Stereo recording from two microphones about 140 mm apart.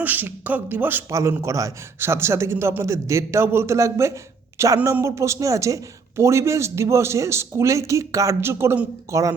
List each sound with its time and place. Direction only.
0.0 s speech: 10° right (ahead or behind)